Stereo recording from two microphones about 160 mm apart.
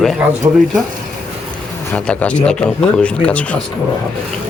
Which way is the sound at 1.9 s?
10° left (ahead or behind).